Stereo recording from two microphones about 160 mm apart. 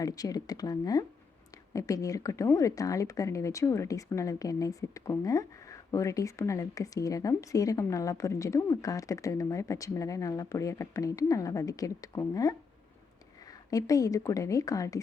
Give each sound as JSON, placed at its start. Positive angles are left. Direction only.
{"t": 0.0, "sound": "a woman's voice", "side_deg": 20}